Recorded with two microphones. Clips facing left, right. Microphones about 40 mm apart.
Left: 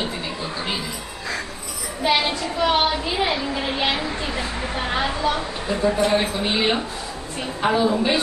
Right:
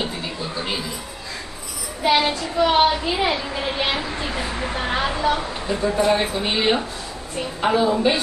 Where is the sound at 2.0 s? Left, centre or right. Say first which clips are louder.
Right 2 dB; centre.